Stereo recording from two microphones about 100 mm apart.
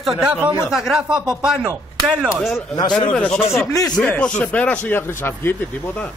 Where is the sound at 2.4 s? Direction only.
5° left (ahead or behind).